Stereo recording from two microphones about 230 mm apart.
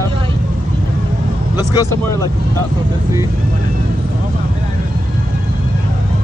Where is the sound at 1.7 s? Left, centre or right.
Centre.